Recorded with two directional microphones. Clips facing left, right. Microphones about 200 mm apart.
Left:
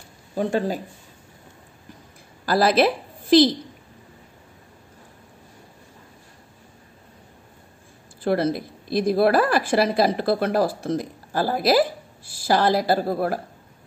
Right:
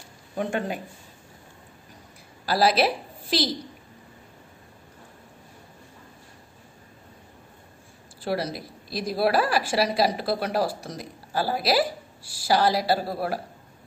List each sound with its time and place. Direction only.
0.3 s speech: 35° left (ahead or behind)
2.4 s a woman's voice: 50° left (ahead or behind)
8.2 s a woman's voice: 55° left (ahead or behind)